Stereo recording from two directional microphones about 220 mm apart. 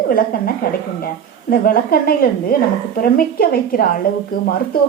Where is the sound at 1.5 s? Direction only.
40° left (ahead or behind).